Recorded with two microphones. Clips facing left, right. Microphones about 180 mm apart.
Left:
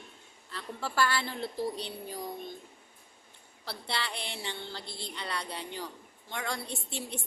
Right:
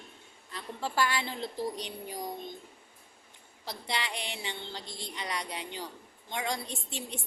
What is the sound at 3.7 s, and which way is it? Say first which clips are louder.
A woman's voice: right 1 dB; 15° right (ahead or behind).